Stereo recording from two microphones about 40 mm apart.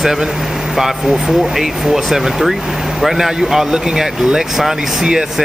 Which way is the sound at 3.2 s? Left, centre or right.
Centre.